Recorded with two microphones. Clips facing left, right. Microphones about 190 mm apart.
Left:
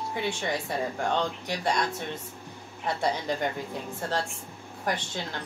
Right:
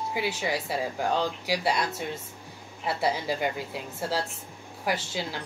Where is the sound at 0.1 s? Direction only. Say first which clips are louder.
Right 1 dB; 5° right (ahead or behind).